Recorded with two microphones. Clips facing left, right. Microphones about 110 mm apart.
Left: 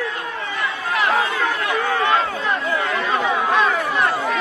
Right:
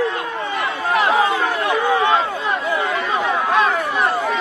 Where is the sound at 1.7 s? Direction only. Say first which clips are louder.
Right 4 dB; 20° right (ahead or behind).